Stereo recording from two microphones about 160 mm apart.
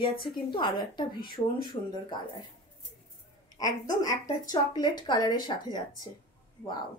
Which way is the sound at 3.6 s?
25° left (ahead or behind).